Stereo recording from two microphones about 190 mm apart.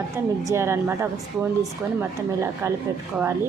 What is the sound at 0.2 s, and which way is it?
Speech, 15° right (ahead or behind).